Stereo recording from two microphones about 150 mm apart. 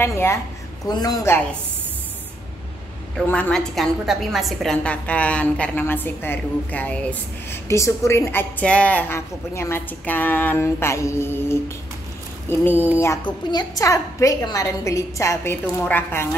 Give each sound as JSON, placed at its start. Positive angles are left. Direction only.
{"t": 0.0, "sound": "a woman's voice", "side_deg": 15}
{"t": 3.2, "sound": "a woman's voice", "side_deg": 10}
{"t": 13.0, "sound": "a woman's voice", "side_deg": 25}